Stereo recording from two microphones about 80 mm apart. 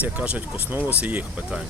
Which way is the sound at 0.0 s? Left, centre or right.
Centre.